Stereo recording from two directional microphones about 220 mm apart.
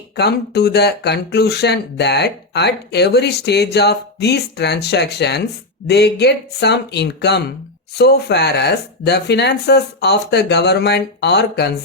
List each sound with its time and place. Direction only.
0.2 s speech: 45° left (ahead or behind)